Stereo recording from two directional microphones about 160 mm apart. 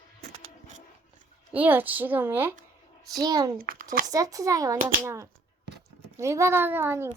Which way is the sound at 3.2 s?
25° right (ahead or behind).